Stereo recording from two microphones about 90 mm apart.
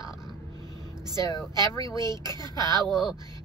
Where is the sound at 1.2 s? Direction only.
40° left (ahead or behind).